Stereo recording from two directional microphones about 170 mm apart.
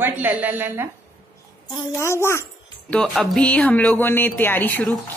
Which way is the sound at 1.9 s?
15° left (ahead or behind).